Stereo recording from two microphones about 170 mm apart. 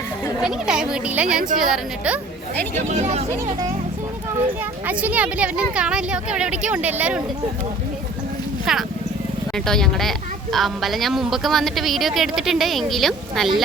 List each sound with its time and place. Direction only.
0.4 s speech: 5° right (ahead or behind)
2.9 s speech: 40° right (ahead or behind)
4.9 s a woman's voice: 10° right (ahead or behind)
8.7 s speech: centre (ahead or behind)